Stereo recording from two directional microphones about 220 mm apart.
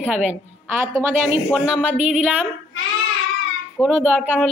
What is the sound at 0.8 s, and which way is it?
Speech, 10° right (ahead or behind).